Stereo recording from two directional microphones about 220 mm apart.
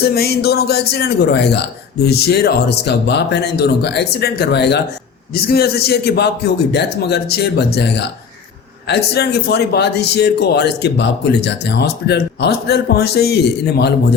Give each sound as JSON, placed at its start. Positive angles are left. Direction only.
{"t": 0.0, "sound": "a man's voice", "side_deg": 45}